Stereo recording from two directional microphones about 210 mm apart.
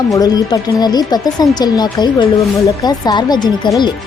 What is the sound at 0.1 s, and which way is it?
Speech, 15° left (ahead or behind).